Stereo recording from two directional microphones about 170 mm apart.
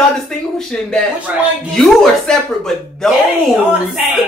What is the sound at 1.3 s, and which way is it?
A woman's voice, 10° right (ahead or behind).